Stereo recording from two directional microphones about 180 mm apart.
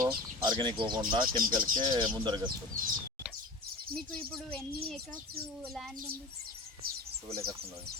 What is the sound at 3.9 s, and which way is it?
Speech, 5° left (ahead or behind).